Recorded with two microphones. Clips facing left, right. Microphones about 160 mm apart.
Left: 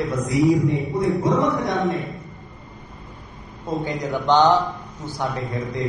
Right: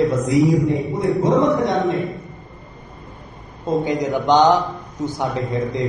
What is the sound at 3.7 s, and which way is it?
A man's voice, 20° right (ahead or behind).